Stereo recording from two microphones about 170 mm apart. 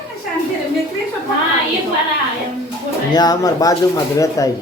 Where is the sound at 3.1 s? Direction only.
25° left (ahead or behind).